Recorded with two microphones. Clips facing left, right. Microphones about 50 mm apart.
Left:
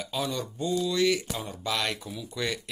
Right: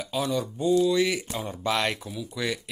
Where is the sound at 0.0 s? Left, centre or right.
Centre.